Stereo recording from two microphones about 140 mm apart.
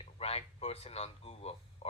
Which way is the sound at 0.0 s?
45° left (ahead or behind).